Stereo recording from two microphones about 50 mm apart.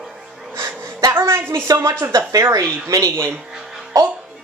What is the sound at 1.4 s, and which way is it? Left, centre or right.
Speech, right.